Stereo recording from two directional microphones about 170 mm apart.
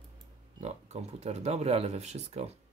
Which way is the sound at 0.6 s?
40° right (ahead or behind).